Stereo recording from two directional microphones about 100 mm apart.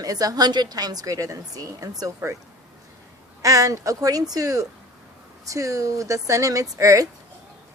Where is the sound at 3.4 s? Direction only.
35° right (ahead or behind).